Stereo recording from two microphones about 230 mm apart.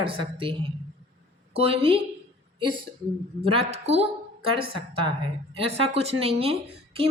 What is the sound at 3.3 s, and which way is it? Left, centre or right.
A woman's voice, right.